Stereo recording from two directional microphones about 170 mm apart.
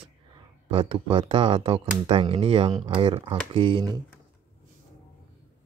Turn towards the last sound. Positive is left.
turn(degrees=-25)  # may be behind; listen again after turning